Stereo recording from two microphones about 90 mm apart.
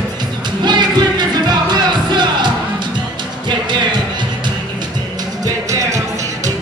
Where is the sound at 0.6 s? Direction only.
55° right (ahead or behind).